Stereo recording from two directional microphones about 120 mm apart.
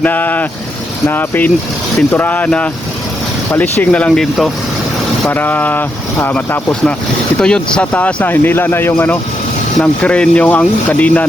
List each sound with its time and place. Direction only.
0.0 s speech: 15° left (ahead or behind)
5.3 s speech: 15° left (ahead or behind)